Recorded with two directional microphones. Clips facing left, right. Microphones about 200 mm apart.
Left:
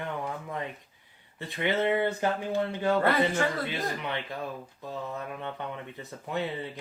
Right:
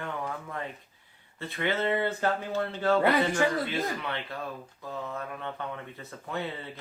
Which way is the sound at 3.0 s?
15° right (ahead or behind).